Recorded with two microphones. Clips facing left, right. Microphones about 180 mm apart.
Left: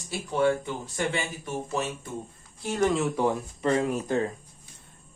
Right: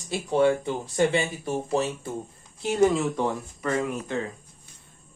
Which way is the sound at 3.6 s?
35° left (ahead or behind).